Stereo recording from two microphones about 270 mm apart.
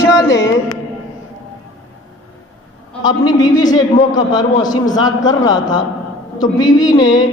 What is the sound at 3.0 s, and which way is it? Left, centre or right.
A man's voice, centre.